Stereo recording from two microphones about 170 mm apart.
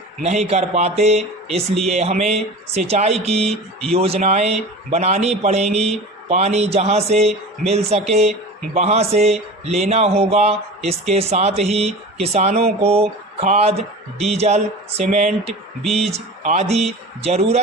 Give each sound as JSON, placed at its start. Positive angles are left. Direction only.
{"t": 0.2, "sound": "a man's voice", "side_deg": -40}
{"t": 3.4, "sound": "speech", "side_deg": 0}
{"t": 3.9, "sound": "a man's voice", "side_deg": -35}